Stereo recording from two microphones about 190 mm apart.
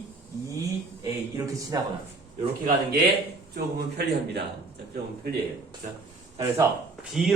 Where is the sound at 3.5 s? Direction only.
60° right (ahead or behind).